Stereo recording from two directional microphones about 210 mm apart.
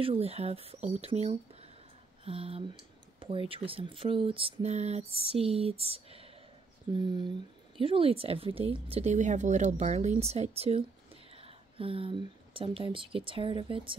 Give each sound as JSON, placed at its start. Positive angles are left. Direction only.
{"t": 0.0, "sound": "speech", "side_deg": -30}